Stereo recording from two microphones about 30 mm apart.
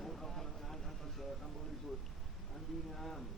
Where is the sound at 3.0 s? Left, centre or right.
Centre.